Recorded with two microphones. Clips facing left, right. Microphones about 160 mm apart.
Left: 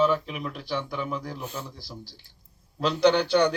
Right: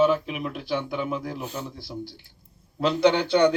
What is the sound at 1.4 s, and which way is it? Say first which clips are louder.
Speech: right 3 dB; 15° right (ahead or behind).